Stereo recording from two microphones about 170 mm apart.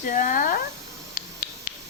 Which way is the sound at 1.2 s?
55° left (ahead or behind).